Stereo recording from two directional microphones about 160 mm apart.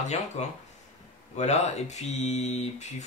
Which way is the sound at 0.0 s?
45° left (ahead or behind).